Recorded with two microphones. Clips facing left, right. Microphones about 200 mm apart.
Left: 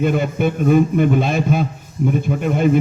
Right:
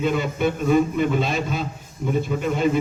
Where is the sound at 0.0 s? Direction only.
50° left (ahead or behind).